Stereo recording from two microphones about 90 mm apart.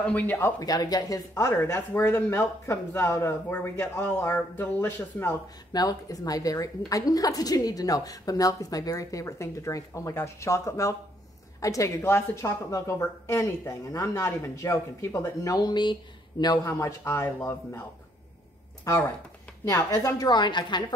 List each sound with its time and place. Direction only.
0.0 s speech: 15° left (ahead or behind)
0.6 s speech: 45° left (ahead or behind); by 3.9 s 15° left (ahead or behind)
3.9 s speech: 25° left (ahead or behind)
5.7 s speech: 45° left (ahead or behind)
16.6 s speech: 30° left (ahead or behind)
18.9 s speech: 25° left (ahead or behind)
19.6 s a woman's voice: 40° left (ahead or behind); by 20.8 s 55° left (ahead or behind)